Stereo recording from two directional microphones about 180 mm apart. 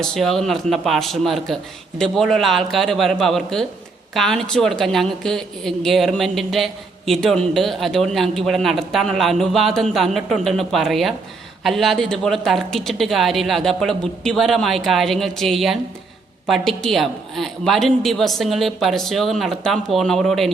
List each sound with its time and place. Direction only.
0.0 s speech: centre (ahead or behind)